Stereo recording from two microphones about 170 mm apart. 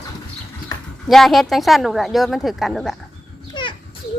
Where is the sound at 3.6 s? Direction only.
25° left (ahead or behind).